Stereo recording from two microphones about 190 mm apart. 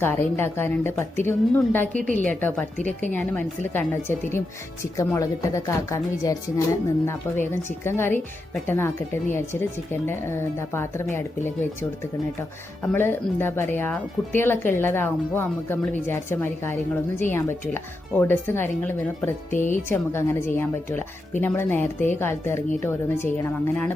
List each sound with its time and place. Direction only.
0.0 s speech: 10° left (ahead or behind)
7.5 s speech: 10° left (ahead or behind)
12.4 s speech: 10° left (ahead or behind)
19.5 s speech: 45° left (ahead or behind)
19.9 s speech: 10° left (ahead or behind)